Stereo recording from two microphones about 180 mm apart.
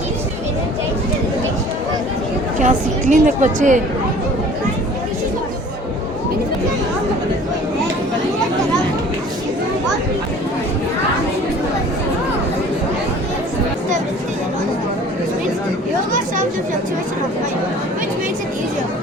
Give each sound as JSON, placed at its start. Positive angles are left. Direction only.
{"t": 2.6, "sound": "a woman's voice", "side_deg": -45}